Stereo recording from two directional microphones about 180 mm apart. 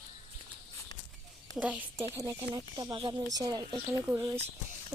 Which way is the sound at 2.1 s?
20° right (ahead or behind).